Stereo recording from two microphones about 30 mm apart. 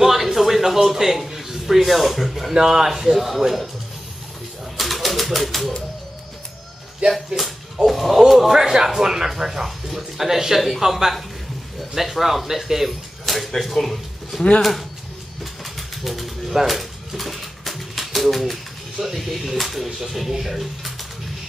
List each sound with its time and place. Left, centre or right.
0.0 s music: centre
2.1 s speech: centre
2.5 s speech: right; by 3.6 s centre
4.7 s a sound: centre
7.1 s speech: centre
8.5 s speech: centre
13.2 s a sound: centre
13.6 s speech: centre
15.6 s a sound: centre
19.5 s speech: centre